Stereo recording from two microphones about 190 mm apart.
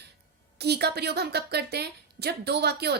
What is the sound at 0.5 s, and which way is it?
A woman's voice, 60° right (ahead or behind).